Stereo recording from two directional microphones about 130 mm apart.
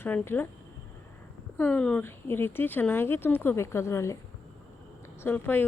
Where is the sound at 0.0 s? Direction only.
15° left (ahead or behind).